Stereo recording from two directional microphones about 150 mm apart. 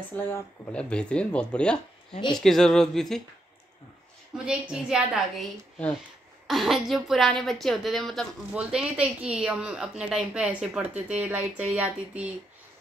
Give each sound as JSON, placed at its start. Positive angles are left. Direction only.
{"t": 0.1, "sound": "speech", "side_deg": 10}
{"t": 2.1, "sound": "speech", "side_deg": 30}
{"t": 2.4, "sound": "speech", "side_deg": 5}
{"t": 4.5, "sound": "a woman's voice", "side_deg": -5}